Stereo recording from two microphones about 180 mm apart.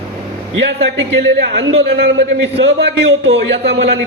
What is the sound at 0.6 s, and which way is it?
Speech, 90° right.